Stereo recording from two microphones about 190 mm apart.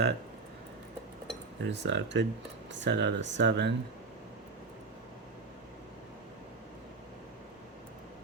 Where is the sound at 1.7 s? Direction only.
70° right (ahead or behind).